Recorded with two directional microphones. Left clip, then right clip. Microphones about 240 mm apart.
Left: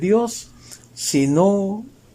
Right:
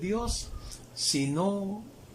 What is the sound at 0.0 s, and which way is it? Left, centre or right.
Speech, left.